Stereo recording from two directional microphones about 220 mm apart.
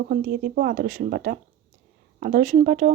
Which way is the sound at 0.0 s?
40° right (ahead or behind).